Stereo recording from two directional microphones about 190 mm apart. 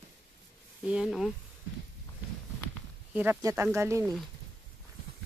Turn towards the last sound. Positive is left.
turn(degrees=-15)  # may be behind; listen again after turning